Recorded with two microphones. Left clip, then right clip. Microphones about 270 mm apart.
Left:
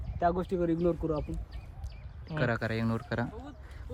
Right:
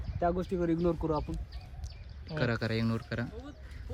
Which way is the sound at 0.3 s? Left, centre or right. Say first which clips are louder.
Left 2 dB; centre.